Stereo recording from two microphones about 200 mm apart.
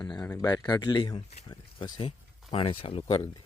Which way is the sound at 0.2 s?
15° left (ahead or behind).